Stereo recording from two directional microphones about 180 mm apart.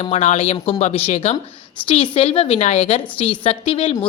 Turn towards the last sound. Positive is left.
turn(degrees=30)  # may be behind; listen again after turning